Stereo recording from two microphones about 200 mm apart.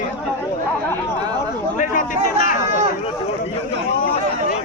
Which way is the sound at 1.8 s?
40° left (ahead or behind).